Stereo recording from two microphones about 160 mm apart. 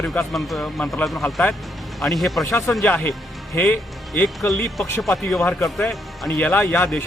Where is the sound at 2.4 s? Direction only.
15° left (ahead or behind).